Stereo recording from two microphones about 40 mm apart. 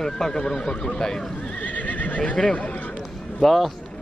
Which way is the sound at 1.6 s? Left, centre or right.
Left.